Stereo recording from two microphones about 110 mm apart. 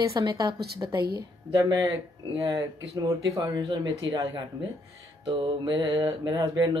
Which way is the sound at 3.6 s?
45° right (ahead or behind).